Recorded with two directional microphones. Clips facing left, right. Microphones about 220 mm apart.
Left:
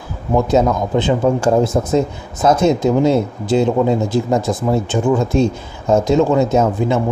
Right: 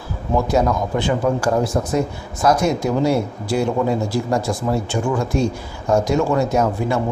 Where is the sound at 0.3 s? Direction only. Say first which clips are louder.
Left 4 dB; 10° left (ahead or behind).